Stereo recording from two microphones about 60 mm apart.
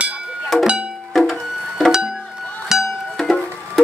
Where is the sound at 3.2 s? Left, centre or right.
Centre.